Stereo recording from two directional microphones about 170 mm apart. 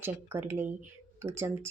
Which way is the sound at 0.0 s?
10° right (ahead or behind).